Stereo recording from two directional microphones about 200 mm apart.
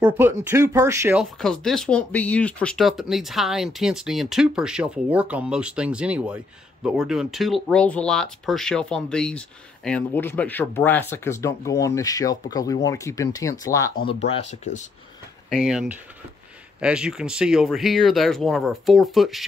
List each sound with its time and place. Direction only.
0.0 s speech: 10° right (ahead or behind)
1.4 s speech: centre (ahead or behind)
14.0 s speech: 30° left (ahead or behind)
15.5 s speech: centre (ahead or behind)